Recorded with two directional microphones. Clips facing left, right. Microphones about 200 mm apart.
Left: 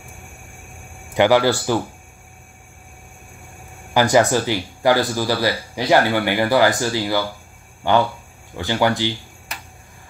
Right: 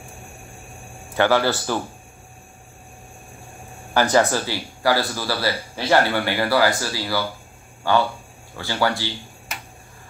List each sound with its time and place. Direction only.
1.1 s speech: 15° left (ahead or behind)
3.9 s speech: 15° left (ahead or behind)